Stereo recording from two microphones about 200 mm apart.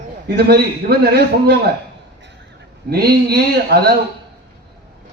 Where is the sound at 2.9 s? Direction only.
50° right (ahead or behind).